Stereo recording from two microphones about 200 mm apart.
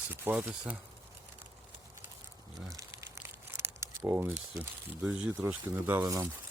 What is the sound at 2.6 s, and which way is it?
Crumpling, 15° right (ahead or behind).